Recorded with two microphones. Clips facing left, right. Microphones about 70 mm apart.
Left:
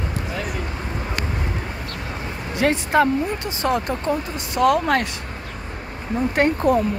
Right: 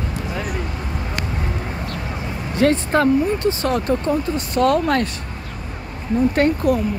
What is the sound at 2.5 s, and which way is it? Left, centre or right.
Speech, centre.